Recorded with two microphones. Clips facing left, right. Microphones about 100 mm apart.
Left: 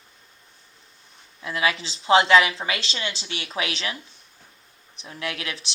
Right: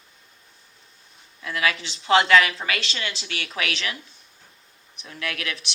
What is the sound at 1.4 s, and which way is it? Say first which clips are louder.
Speech: left 1 dB; 25° left (ahead or behind).